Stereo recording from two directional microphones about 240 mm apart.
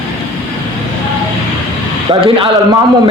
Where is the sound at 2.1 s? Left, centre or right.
Centre.